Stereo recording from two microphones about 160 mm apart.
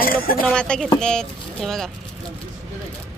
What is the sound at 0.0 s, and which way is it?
Speech, 65° left (ahead or behind).